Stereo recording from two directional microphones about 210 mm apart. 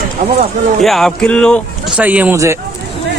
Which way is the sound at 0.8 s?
Centre (ahead or behind).